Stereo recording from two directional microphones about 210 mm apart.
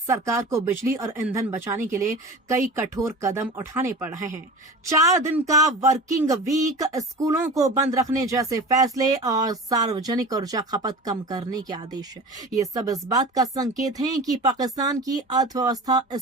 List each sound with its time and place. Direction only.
0.1 s speech: 15° right (ahead or behind)